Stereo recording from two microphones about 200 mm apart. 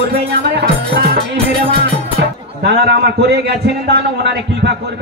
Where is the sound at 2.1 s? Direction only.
55° right (ahead or behind).